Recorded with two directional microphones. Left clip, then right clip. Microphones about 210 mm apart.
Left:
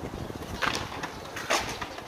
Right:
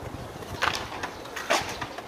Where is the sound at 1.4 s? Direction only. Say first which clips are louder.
Right 2 dB; 10° right (ahead or behind).